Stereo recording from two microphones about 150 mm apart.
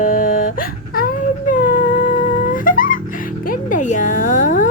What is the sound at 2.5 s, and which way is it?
Music, 65° left (ahead or behind).